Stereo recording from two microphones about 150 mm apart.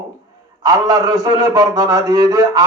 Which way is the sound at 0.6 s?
25° right (ahead or behind).